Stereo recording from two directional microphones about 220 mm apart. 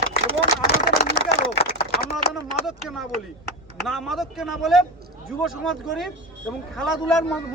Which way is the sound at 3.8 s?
Centre (ahead or behind).